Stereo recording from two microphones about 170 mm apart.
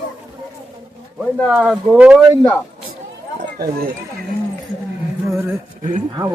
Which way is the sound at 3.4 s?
65° right (ahead or behind).